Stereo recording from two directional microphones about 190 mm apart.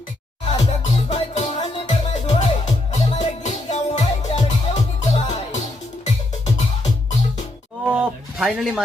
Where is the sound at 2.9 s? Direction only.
35° left (ahead or behind).